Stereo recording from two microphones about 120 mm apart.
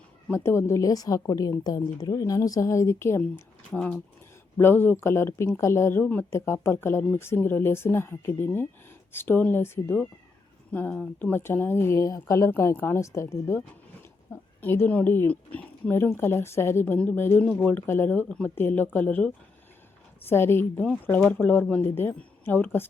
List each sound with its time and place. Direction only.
0.3 s speech: 20° left (ahead or behind)
3.7 s speech: 10° left (ahead or behind)
14.6 s speech: 15° left (ahead or behind)